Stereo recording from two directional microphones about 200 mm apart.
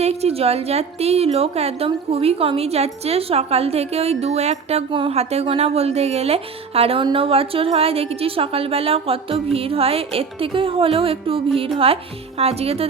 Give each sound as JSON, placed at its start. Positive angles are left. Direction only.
{"t": 0.0, "sound": "a woman's voice", "side_deg": -30}